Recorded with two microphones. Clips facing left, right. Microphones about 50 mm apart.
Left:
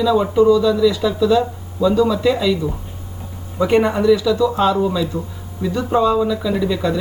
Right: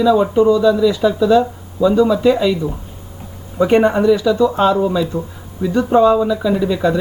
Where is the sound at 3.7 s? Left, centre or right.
Right.